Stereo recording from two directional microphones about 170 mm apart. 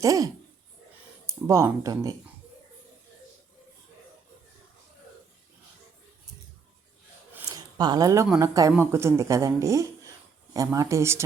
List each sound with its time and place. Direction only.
0.0 s speech: 20° right (ahead or behind)
1.5 s speech: 20° right (ahead or behind)
7.3 s a sound: 20° right (ahead or behind)
8.4 s speech: 20° right (ahead or behind)